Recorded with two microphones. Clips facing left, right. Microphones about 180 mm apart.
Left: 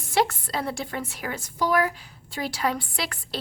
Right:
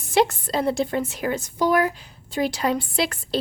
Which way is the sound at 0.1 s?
20° right (ahead or behind).